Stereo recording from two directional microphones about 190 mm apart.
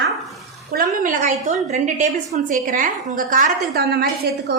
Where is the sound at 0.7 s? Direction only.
45° right (ahead or behind).